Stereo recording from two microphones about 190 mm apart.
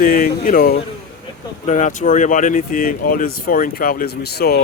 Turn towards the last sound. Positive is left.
turn(degrees=60)  # may be behind; listen again after turning